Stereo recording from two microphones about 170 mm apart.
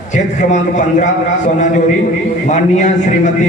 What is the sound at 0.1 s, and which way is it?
A man's voice, 45° left (ahead or behind).